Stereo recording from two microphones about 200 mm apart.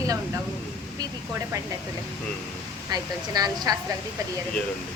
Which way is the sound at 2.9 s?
20° right (ahead or behind).